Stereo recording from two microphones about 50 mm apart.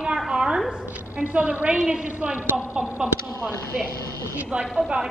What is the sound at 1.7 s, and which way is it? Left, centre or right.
A woman's voice, centre.